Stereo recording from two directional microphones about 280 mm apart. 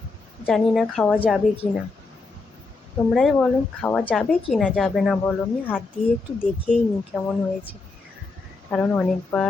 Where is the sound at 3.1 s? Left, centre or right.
Centre.